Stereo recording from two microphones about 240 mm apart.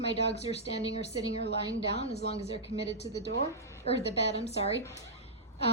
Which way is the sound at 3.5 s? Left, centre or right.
Centre.